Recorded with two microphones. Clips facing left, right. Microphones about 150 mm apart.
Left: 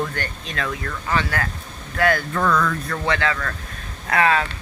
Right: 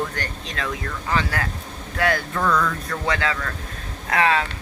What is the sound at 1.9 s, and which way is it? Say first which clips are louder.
Speech: left 2 dB; 20° right (ahead or behind).